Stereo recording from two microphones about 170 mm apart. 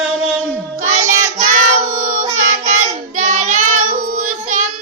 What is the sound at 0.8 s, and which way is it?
Child singing, 45° right (ahead or behind).